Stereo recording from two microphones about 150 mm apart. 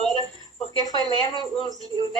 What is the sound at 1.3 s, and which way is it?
Speech, 35° left (ahead or behind).